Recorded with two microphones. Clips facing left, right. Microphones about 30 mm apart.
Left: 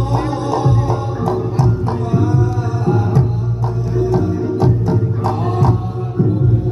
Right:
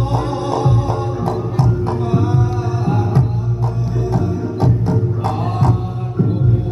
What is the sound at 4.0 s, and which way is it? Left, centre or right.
Music, centre.